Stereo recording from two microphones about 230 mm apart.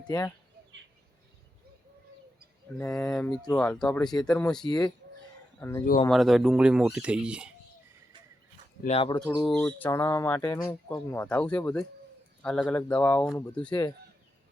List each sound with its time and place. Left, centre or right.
0.1 s speech: centre
2.7 s speech: centre
4.6 s speech: centre
6.1 s speech: centre
8.8 s speech: left
9.1 s speech: centre